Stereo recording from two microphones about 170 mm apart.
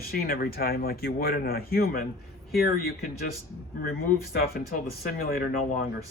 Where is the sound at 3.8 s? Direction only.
55° left (ahead or behind).